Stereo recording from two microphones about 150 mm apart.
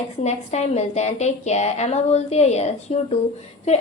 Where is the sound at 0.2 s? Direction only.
50° left (ahead or behind).